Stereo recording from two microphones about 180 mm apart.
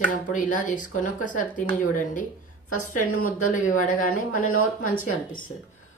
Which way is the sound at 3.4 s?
45° left (ahead or behind).